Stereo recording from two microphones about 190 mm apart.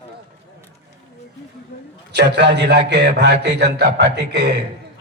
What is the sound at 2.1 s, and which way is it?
A man's voice, 65° right (ahead or behind).